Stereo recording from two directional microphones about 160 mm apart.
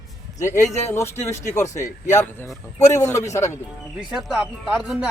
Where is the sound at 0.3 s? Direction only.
20° left (ahead or behind).